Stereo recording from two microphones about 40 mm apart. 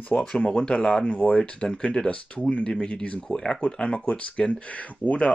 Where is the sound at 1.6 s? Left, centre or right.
Centre.